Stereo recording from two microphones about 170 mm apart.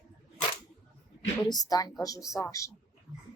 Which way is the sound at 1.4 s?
20° left (ahead or behind).